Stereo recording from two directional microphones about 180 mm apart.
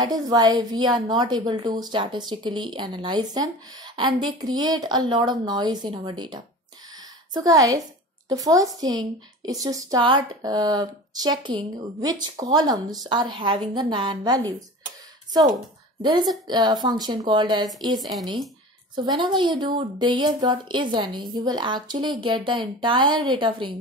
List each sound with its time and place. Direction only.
0.0 s a woman's voice: 20° right (ahead or behind)
7.0 s a sound: 20° right (ahead or behind)
8.3 s a woman's voice: 20° right (ahead or behind)
16.0 s a woman's voice: 25° right (ahead or behind)
17.9 s speech: centre (ahead or behind)
19.0 s a woman's voice: 25° right (ahead or behind)